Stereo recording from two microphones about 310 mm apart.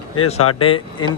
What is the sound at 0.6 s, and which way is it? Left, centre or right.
Speech, centre.